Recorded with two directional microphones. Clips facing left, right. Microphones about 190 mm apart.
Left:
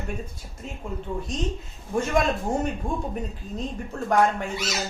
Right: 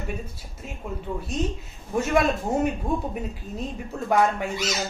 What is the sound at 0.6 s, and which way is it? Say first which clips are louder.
Speech: left 1 dB; 5° right (ahead or behind).